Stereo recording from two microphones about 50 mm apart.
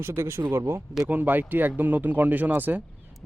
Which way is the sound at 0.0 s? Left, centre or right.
Right.